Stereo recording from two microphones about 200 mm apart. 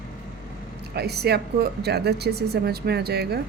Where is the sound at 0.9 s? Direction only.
55° right (ahead or behind).